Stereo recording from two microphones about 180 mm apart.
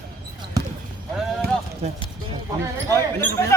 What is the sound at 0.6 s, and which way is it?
Basketball bounce, 20° right (ahead or behind).